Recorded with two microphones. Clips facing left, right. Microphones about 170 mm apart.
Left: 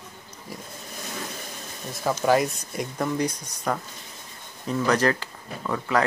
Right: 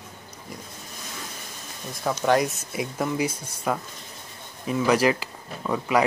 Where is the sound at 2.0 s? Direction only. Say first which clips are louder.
Even; centre (ahead or behind).